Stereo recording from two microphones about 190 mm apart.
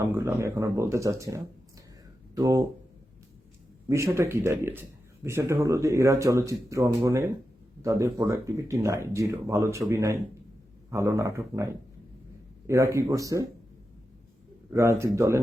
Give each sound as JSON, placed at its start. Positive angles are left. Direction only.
{"t": 0.0, "sound": "speech", "side_deg": -15}
{"t": 3.8, "sound": "speech", "side_deg": -15}
{"t": 14.7, "sound": "speech", "side_deg": -15}